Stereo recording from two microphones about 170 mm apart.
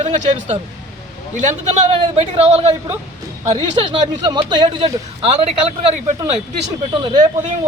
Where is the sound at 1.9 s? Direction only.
35° right (ahead or behind).